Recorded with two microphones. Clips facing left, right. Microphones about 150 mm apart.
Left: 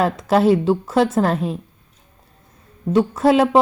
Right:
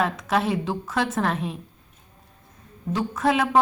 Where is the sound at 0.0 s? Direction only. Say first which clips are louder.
Left 7 dB; 35° left (ahead or behind).